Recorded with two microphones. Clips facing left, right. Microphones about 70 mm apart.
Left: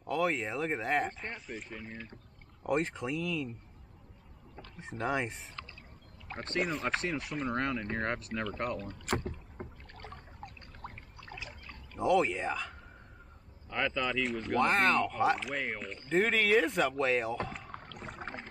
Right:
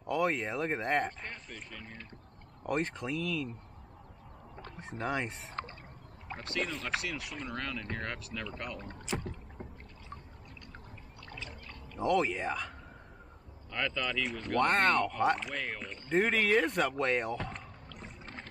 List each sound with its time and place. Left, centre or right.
0.0 s speech: centre
5.0 s speech: centre
6.6 s speech: left
8.7 s speech: right
9.6 s rowboat: left
10.0 s a sound: left
11.2 s rowboat: centre
11.9 s speech: centre
13.7 s speech: centre
14.2 s speech: centre
18.2 s a sound: centre